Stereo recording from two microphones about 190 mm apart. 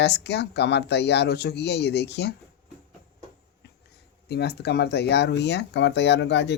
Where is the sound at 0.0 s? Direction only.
65° left (ahead or behind).